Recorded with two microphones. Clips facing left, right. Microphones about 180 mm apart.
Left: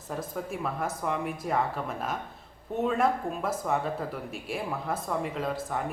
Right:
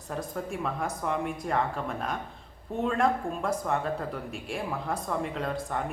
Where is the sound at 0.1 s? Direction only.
Centre (ahead or behind).